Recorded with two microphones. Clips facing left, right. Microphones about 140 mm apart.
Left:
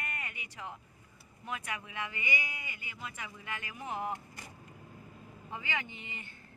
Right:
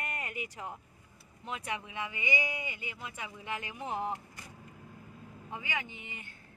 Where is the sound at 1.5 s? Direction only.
25° right (ahead or behind).